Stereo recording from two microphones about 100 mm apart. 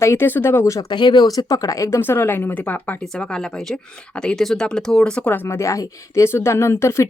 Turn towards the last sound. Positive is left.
turn(degrees=25)  # may be behind; listen again after turning